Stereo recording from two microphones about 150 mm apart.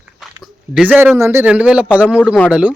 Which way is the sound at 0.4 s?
5° right (ahead or behind).